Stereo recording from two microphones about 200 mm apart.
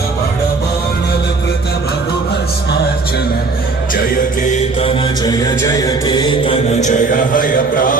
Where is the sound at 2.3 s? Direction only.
55° left (ahead or behind).